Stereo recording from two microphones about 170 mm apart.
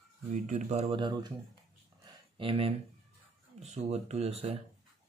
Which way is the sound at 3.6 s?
40° right (ahead or behind).